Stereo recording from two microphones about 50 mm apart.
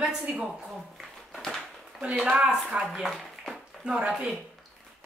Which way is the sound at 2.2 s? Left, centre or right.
Centre.